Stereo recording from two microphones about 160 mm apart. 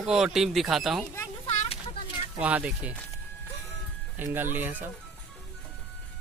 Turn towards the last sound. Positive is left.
turn(degrees=-10)  # may be behind; listen again after turning